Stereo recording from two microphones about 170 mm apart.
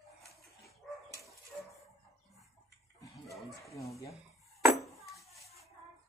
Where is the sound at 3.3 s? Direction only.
20° left (ahead or behind).